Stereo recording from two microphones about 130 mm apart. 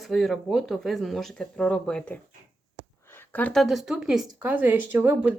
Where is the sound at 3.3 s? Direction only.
10° left (ahead or behind).